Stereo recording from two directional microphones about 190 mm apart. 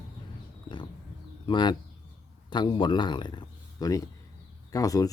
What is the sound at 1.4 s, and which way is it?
Speech, 25° left (ahead or behind).